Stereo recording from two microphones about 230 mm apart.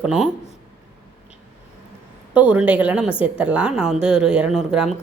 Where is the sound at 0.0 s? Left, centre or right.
Centre.